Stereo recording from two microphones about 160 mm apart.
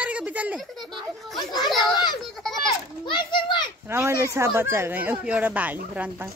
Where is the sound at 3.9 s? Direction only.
15° right (ahead or behind).